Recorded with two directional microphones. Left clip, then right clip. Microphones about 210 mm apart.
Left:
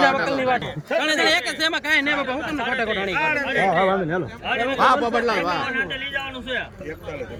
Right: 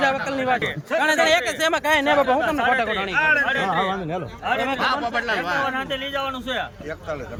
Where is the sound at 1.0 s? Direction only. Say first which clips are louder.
Right 2 dB; 10° right (ahead or behind).